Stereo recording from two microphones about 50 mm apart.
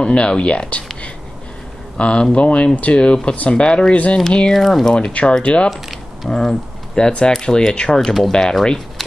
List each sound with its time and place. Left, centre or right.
0.0 s speech: left
2.0 s speech: left
4.6 s speech: centre
4.9 s speech: left